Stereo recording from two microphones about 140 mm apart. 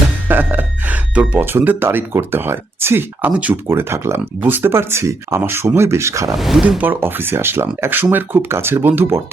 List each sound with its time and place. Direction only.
0.3 s speech: 15° right (ahead or behind)
6.3 s speech: centre (ahead or behind)